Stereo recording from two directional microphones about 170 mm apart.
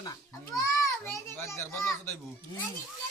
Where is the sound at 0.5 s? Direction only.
20° left (ahead or behind).